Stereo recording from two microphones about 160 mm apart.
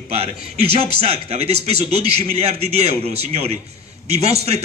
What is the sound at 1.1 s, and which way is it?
A man's voice, 40° right (ahead or behind).